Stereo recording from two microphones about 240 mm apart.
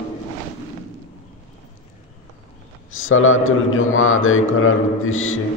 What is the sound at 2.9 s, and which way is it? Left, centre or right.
A man's voice, left.